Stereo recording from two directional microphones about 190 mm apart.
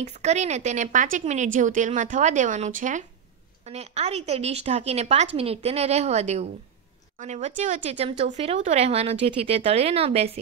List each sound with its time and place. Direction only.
0.0 s a woman's voice: 35° right (ahead or behind)